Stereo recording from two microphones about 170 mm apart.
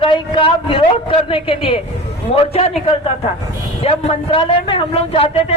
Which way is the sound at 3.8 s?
35° left (ahead or behind).